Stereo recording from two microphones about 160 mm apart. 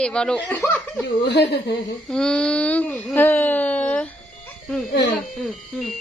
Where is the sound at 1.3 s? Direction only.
90° left.